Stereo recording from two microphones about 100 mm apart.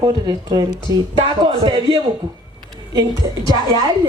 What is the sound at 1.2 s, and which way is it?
Speech, 60° right (ahead or behind).